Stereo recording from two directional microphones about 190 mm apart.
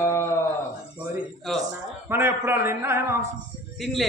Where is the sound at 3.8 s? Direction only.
Centre (ahead or behind).